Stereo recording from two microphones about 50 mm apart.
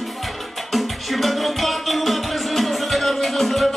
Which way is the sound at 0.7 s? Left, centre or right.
Centre.